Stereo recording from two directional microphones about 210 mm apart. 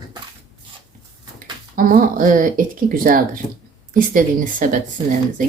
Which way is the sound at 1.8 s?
40° right (ahead or behind).